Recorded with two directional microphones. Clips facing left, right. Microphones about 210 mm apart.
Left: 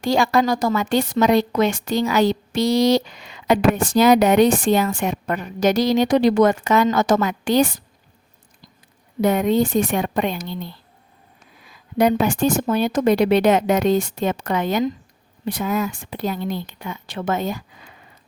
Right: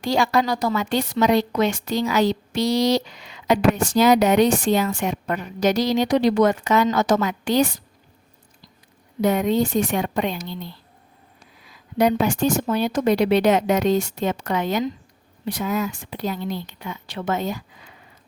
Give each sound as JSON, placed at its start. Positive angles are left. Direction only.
{"t": 0.0, "sound": "a woman's voice", "side_deg": 50}
{"t": 9.2, "sound": "a woman's voice", "side_deg": 55}
{"t": 11.9, "sound": "a woman's voice", "side_deg": 50}